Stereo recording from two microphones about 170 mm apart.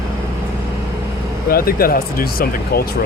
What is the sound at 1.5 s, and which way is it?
Speech, 60° left (ahead or behind).